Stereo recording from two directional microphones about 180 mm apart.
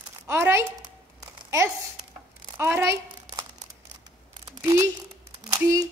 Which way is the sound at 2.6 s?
15° right (ahead or behind).